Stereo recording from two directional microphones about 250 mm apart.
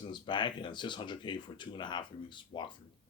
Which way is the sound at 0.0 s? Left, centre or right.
Centre.